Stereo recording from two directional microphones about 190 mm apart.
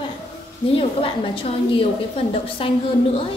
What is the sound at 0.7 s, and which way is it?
Speech, 30° left (ahead or behind).